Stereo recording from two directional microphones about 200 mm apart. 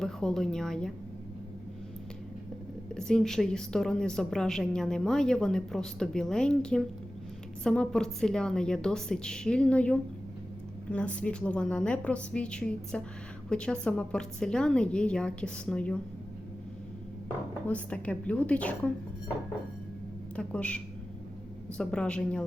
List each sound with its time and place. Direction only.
0.0 s a woman's voice: 5° left (ahead or behind)
3.1 s a woman's voice: centre (ahead or behind)
17.7 s speech: 5° left (ahead or behind)
20.3 s a woman's voice: 5° left (ahead or behind)